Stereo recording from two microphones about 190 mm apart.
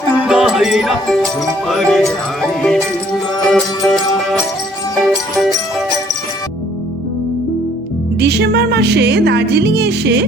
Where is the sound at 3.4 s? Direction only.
5° left (ahead or behind).